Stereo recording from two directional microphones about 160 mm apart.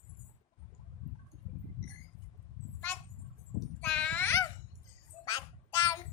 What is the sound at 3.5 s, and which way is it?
Babbling, 5° left (ahead or behind).